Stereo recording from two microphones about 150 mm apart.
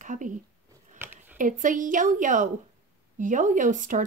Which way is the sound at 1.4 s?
60° right (ahead or behind).